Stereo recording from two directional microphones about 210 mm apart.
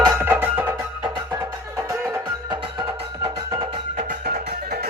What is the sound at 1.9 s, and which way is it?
Music, 10° right (ahead or behind).